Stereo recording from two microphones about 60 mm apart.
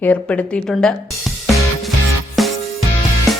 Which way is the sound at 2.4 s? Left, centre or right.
Centre.